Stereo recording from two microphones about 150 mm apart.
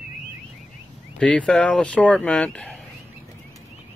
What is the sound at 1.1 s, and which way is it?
Speech, 5° left (ahead or behind).